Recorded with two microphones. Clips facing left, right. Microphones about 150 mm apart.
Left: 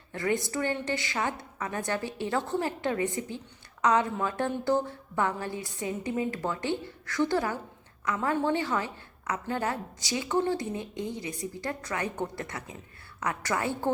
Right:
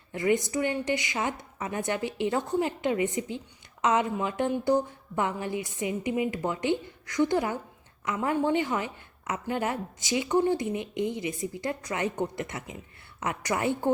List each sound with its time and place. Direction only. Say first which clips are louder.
0.1 s a woman's voice: right 3 dB; 20° right (ahead or behind)